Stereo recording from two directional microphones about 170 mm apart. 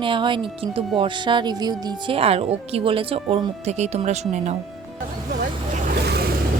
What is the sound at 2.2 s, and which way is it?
Speech, 35° right (ahead or behind).